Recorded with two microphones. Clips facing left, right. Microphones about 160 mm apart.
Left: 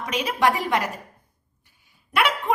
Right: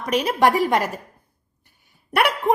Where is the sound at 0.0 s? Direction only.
50° right (ahead or behind).